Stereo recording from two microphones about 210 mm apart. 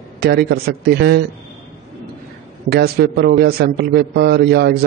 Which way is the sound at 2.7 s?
50° right (ahead or behind).